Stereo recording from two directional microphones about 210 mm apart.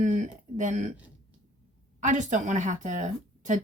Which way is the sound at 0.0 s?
35° right (ahead or behind).